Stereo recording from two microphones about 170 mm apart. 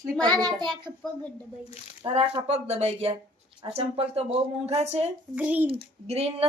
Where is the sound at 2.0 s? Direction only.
35° right (ahead or behind).